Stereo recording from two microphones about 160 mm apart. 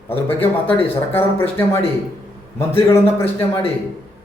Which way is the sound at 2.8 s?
15° left (ahead or behind).